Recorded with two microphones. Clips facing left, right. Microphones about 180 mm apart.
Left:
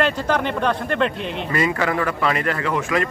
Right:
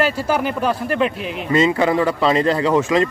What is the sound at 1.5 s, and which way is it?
Speech, 20° right (ahead or behind).